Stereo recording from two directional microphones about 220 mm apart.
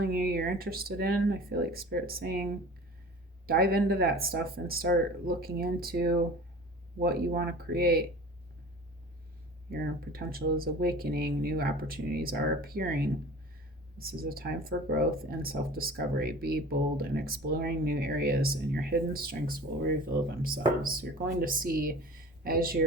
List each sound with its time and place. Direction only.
0.0 s speech: 45° right (ahead or behind)
9.6 s speech: 45° right (ahead or behind)